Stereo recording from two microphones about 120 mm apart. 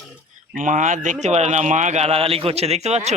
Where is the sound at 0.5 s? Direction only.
90° right.